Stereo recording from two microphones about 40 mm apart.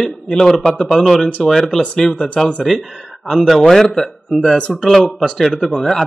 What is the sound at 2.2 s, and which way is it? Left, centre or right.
Speech, left.